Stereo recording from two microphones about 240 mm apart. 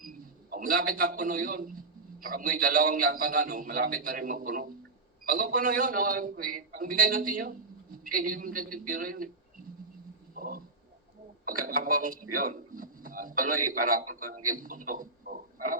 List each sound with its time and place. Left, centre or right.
0.0 s a man's voice: right
10.3 s a sound: right
11.7 s a man's voice: right
14.5 s radio: right